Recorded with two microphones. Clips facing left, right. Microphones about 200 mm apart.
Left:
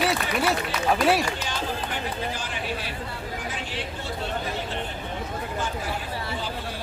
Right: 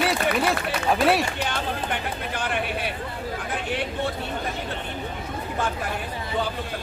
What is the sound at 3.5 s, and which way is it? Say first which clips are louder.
Vehicle: right 5 dB; 60° right (ahead or behind).